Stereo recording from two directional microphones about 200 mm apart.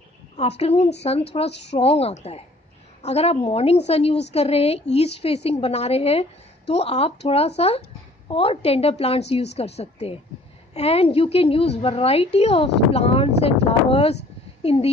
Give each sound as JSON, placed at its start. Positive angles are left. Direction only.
{"t": 0.4, "sound": "a woman's voice", "side_deg": 30}
{"t": 1.5, "sound": "a woman's voice", "side_deg": 60}
{"t": 1.8, "sound": "a woman's voice", "side_deg": 30}